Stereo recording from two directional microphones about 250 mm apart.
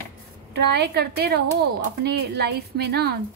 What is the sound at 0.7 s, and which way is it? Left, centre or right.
A woman's voice, right.